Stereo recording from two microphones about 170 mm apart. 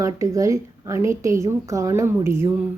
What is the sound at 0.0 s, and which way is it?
Speech, 20° right (ahead or behind).